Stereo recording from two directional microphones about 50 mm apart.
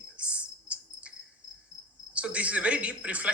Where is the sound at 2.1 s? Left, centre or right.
Right.